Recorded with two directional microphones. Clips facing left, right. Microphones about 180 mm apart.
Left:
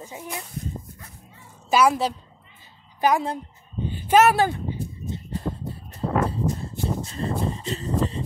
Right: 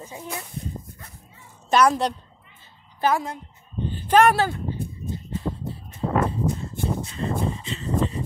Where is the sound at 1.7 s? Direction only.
5° left (ahead or behind).